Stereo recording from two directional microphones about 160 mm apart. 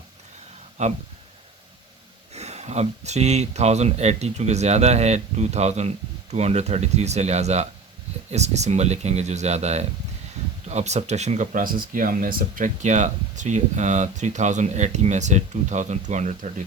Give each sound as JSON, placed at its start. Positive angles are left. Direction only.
{"t": 0.8, "sound": "speech", "side_deg": -45}
{"t": 2.3, "sound": "speech", "side_deg": -45}